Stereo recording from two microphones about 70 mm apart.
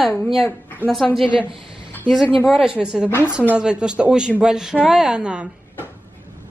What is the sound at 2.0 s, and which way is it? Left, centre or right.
A woman's voice, centre.